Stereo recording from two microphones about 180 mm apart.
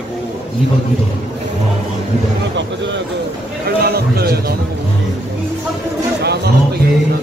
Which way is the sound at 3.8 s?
60° right (ahead or behind).